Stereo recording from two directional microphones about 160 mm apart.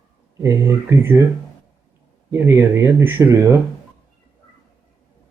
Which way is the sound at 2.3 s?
15° right (ahead or behind).